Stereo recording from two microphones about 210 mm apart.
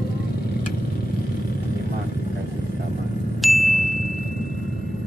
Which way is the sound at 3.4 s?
Centre (ahead or behind).